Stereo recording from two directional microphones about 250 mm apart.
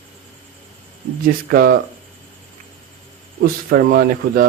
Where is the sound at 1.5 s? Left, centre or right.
Right.